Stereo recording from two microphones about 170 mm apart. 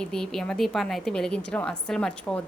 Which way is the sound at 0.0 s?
5° left (ahead or behind).